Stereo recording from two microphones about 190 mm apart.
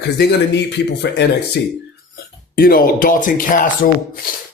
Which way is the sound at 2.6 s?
50° left (ahead or behind).